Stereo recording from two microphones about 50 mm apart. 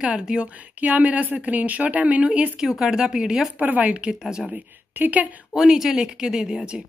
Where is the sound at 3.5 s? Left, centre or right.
Right.